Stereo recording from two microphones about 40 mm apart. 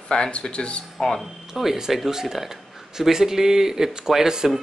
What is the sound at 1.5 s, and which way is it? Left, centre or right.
Speech, centre.